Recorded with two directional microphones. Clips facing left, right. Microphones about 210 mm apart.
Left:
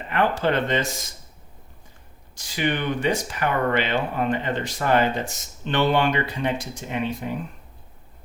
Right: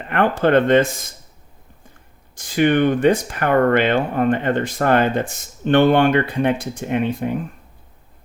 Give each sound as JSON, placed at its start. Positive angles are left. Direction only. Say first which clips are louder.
{"t": 0.1, "sound": "speech", "louder": "right 6 dB", "side_deg": -55}
{"t": 2.3, "sound": "speech", "louder": "right 9 dB", "side_deg": -50}